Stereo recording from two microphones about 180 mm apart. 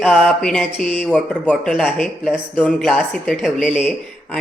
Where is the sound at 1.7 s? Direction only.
5° right (ahead or behind).